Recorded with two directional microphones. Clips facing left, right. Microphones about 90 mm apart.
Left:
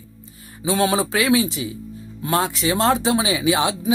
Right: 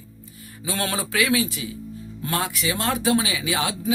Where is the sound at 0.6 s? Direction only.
20° left (ahead or behind).